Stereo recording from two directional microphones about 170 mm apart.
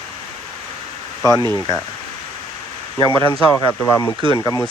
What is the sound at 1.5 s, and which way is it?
Speech, 20° left (ahead or behind).